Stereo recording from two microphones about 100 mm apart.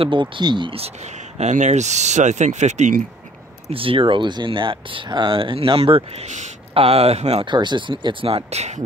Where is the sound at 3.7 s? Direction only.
65° right (ahead or behind).